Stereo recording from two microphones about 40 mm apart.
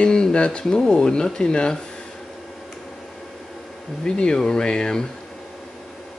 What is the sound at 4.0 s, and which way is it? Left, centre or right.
Speech, left.